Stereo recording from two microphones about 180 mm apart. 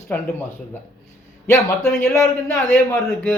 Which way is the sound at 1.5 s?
15° left (ahead or behind).